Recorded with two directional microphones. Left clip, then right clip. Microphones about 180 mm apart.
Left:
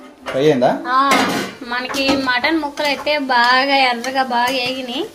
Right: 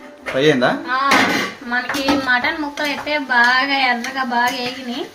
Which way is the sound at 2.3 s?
50° left (ahead or behind).